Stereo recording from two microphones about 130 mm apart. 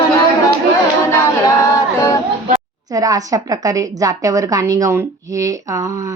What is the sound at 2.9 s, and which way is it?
A woman's voice, 25° right (ahead or behind).